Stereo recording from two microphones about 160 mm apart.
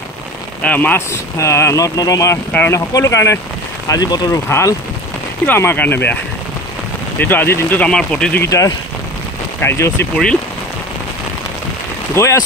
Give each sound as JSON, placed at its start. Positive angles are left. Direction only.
{"t": 0.6, "sound": "speech", "side_deg": 10}
{"t": 7.2, "sound": "speech", "side_deg": 10}
{"t": 8.5, "sound": "speech", "side_deg": 20}
{"t": 12.2, "sound": "speech", "side_deg": 15}